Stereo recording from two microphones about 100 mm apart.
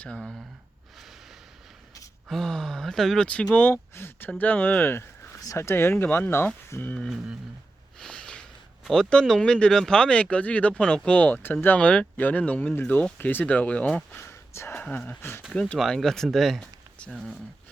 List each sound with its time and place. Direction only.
0.2 s speech: centre (ahead or behind)
2.3 s speech: 5° left (ahead or behind)
7.9 s snort: 10° left (ahead or behind)
8.8 s speech: 5° left (ahead or behind)
14.2 s a sound: 25° left (ahead or behind)
14.7 s speech: 15° left (ahead or behind)
15.7 s speech: 5° left (ahead or behind)